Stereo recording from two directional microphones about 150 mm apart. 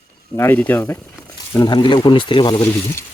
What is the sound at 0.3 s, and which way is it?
Speech, 15° left (ahead or behind).